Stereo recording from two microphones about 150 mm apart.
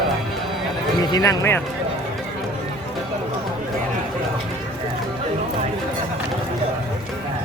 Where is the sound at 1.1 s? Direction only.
20° left (ahead or behind).